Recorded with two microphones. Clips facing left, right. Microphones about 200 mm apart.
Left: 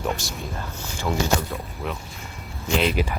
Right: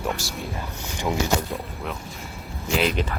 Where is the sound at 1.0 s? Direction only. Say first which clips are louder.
Even; 15° right (ahead or behind).